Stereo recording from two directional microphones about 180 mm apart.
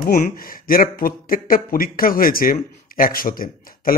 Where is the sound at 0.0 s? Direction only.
50° left (ahead or behind).